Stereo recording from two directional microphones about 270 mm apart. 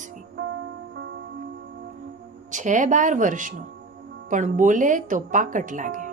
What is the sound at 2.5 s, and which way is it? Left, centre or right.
A woman's voice, right.